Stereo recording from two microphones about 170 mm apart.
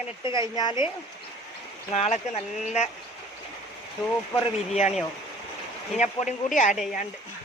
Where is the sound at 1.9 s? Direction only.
40° left (ahead or behind).